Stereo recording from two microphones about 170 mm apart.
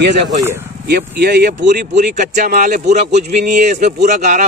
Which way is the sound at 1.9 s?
45° right (ahead or behind).